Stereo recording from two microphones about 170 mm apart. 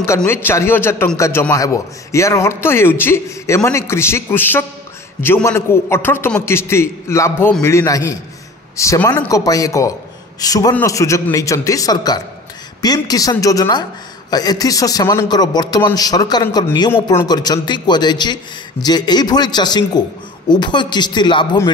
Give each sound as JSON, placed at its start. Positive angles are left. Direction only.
{"t": 0.3, "sound": "a man's voice", "side_deg": 15}